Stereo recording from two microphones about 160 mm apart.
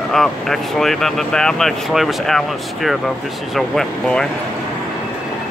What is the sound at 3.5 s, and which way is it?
Speech, 5° left (ahead or behind).